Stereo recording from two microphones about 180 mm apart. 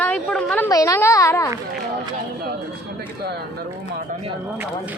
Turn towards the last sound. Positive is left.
turn(degrees=-65)  # may be behind; listen again after turning